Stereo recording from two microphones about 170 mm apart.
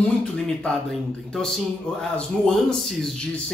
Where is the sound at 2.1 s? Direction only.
5° left (ahead or behind).